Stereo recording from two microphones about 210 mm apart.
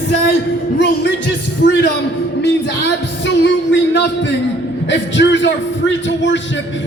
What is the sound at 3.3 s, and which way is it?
A man's voice, 60° left (ahead or behind).